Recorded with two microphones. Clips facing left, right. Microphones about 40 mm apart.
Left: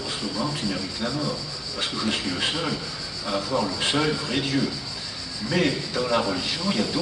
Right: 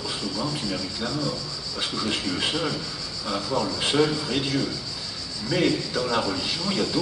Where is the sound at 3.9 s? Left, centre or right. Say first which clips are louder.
Right 4 dB; centre.